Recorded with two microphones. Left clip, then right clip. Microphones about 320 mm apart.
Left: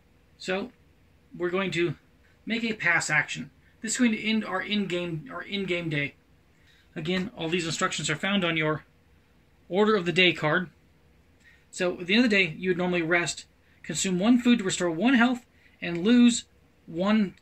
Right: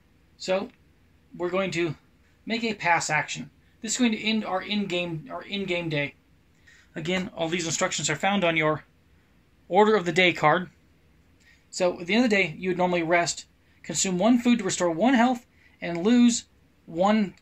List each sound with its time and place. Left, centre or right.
1.4 s speech: centre
11.7 s speech: centre